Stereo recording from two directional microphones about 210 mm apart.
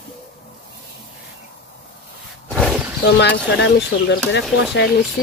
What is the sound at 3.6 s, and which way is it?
Speech, 55° left (ahead or behind).